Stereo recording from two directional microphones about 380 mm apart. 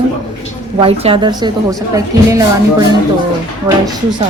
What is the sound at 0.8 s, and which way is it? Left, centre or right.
Speech, centre.